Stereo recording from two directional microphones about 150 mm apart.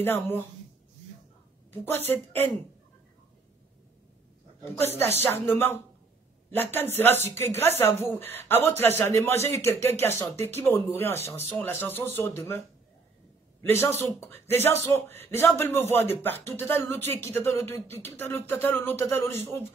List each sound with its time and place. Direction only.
0.0 s speech: 15° left (ahead or behind)
1.7 s speech: 15° left (ahead or behind)
4.7 s a man's voice: 15° left (ahead or behind)